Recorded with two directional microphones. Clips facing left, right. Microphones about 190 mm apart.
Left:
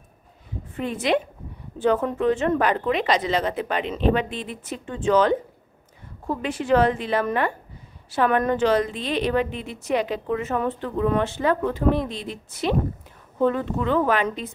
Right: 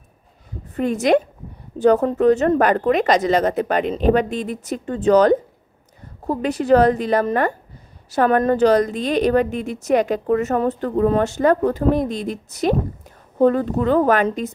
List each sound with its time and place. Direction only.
0.7 s a woman's voice: 45° right (ahead or behind)